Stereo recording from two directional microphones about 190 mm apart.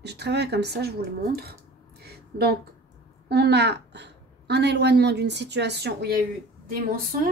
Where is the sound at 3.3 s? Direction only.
60° right (ahead or behind).